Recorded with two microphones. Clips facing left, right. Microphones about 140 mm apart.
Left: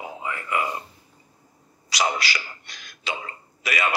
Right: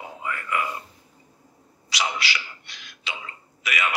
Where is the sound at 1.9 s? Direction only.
40° left (ahead or behind).